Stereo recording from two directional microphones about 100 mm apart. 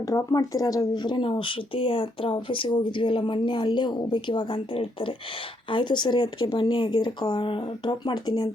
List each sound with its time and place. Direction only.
0.0 s speech: 35° left (ahead or behind); by 5.1 s 65° left (ahead or behind)
5.6 s speech: 55° left (ahead or behind)